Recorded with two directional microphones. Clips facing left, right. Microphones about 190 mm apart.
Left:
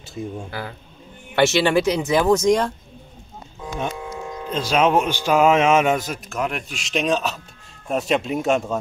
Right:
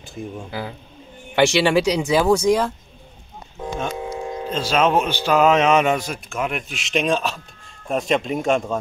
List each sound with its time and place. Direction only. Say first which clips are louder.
0.2 s speech: left 2 dB; 20° left (ahead or behind)
0.5 s speech: right 2 dB; 15° right (ahead or behind)
4.0 s a sound: right 4 dB; 25° right (ahead or behind)
4.5 s speech: left 1 dB; 10° left (ahead or behind)